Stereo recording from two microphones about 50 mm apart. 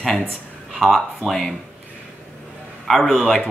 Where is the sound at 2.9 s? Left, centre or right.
Centre.